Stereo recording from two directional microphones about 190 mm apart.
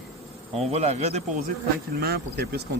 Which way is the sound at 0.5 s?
35° right (ahead or behind).